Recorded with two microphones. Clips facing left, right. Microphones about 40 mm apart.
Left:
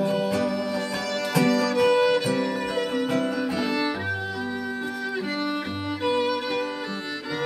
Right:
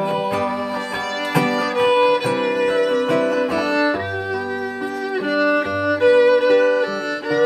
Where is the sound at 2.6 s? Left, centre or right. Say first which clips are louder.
Right 8 dB; right.